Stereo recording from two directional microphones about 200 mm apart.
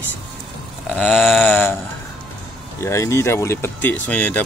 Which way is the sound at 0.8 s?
Centre (ahead or behind).